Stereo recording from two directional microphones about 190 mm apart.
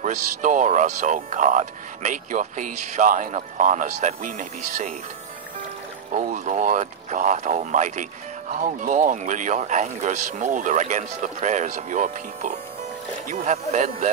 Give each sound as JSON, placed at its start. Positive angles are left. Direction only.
{"t": 0.0, "sound": "speech", "side_deg": -40}
{"t": 6.1, "sound": "speech", "side_deg": -45}